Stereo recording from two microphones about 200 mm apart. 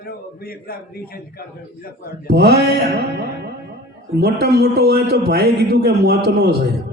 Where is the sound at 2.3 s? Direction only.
55° right (ahead or behind).